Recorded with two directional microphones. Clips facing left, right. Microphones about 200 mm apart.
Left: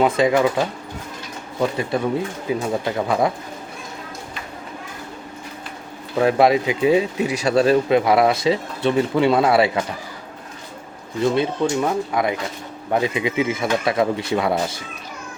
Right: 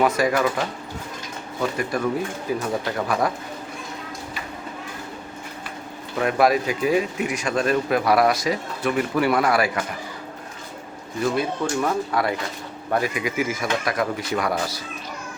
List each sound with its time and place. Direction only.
0.0 s speech: 20° left (ahead or behind)
1.8 s speech: 25° left (ahead or behind)
6.2 s speech: 25° left (ahead or behind)
11.2 s speech: 20° left (ahead or behind)